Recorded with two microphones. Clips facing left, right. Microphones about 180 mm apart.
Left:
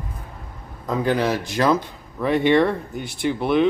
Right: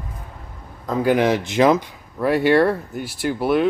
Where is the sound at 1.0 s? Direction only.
15° right (ahead or behind).